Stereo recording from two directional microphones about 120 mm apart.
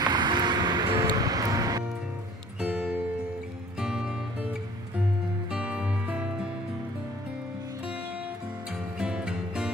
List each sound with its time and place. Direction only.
0.0 s music: 40° right (ahead or behind)
2.6 s music: 10° right (ahead or behind)
5.5 s music: 10° right (ahead or behind)
8.9 s music: 5° right (ahead or behind)